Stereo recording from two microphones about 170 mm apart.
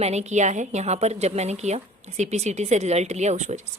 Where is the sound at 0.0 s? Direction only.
40° right (ahead or behind).